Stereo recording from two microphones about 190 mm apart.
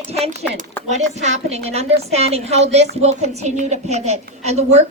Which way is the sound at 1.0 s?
35° right (ahead or behind).